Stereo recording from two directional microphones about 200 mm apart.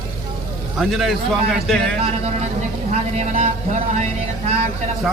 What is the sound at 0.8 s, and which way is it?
A man's voice, centre (ahead or behind).